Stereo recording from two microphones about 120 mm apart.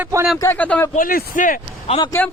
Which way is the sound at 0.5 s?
15° left (ahead or behind).